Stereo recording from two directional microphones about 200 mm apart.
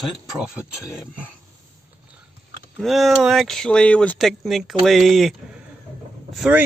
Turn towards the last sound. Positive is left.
turn(degrees=0)  # may be behind; listen again after turning